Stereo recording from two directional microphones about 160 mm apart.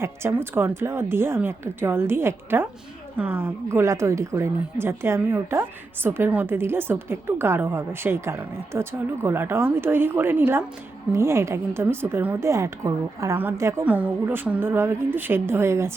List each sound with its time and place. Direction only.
0.0 s a woman's voice: 15° right (ahead or behind)